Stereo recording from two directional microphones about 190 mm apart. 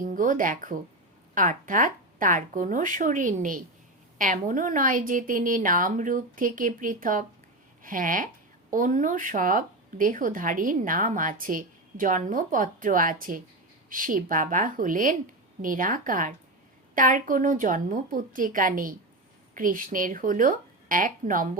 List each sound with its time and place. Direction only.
0.0 s a woman's voice: 45° right (ahead or behind)